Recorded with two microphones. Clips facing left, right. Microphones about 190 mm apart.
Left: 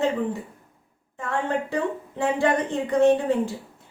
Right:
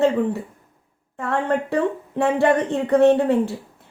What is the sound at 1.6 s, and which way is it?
Speech, 65° right (ahead or behind).